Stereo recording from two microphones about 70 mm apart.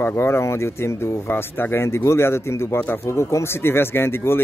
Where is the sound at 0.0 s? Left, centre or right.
Left.